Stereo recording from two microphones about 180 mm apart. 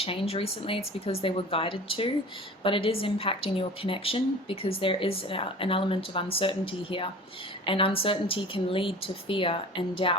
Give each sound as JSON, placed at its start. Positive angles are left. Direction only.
{"t": 0.0, "sound": "a woman's voice", "side_deg": 30}